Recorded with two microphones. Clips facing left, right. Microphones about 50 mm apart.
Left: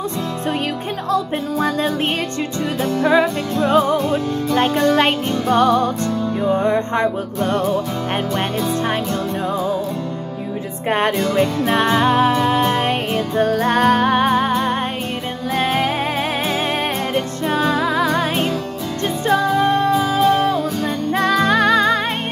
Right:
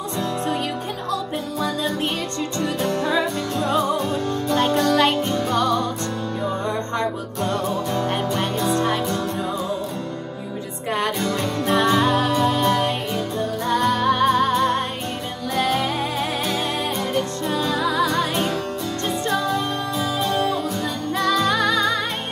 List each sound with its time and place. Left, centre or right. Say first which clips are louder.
1.1 s music: left 8 dB; left
3.6 s music: left 6 dB; left
10.9 s music: left 5 dB; left
11.1 s music: left 6 dB; centre
11.7 s music: left 1 dB; left
12.8 s music: left 4 dB; left
14.5 s music: left 1 dB; centre
15.5 s music: left 3 dB; left
17.1 s music: left 3 dB; left
19.2 s music: left 9 dB; left
21.1 s music: left 4 dB; left